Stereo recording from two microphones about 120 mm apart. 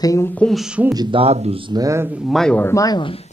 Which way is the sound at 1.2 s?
55° right (ahead or behind).